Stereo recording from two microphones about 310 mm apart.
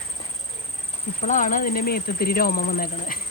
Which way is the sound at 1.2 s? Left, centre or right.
Left.